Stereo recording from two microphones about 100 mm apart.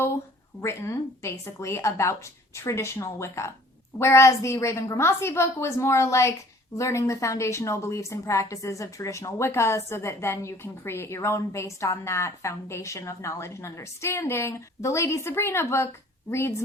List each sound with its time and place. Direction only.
0.6 s a woman's voice: 25° left (ahead or behind)